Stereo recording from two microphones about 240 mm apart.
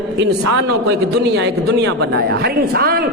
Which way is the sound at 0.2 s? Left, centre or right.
Right.